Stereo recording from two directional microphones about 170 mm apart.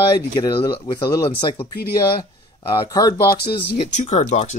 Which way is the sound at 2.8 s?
20° left (ahead or behind).